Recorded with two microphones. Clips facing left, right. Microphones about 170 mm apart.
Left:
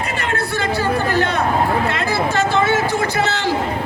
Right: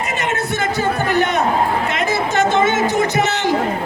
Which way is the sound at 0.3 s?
20° right (ahead or behind).